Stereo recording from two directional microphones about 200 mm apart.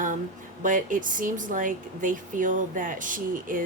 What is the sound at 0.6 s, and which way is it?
Speech, 40° right (ahead or behind).